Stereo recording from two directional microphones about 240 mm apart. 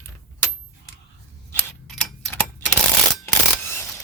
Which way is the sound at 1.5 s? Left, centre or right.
Centre.